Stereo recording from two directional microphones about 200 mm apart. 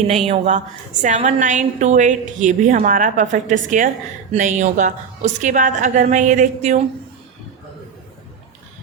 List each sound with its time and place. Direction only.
0.1 s a woman's voice: 35° right (ahead or behind)